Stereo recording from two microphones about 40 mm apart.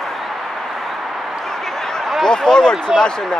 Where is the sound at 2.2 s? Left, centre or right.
Centre.